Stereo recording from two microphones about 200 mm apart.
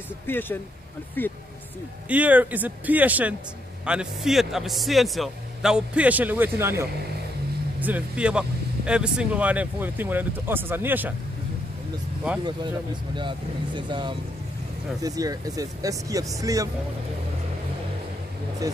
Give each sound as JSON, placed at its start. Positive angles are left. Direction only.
{"t": 0.3, "sound": "speech", "side_deg": 10}
{"t": 2.0, "sound": "a man's voice", "side_deg": -5}
{"t": 13.1, "sound": "speech", "side_deg": -25}